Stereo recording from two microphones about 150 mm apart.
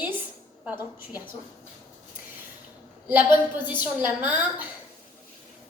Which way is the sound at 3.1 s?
10° right (ahead or behind).